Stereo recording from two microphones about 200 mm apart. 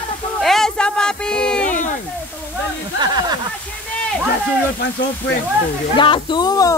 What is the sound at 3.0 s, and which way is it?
Speech, 20° right (ahead or behind).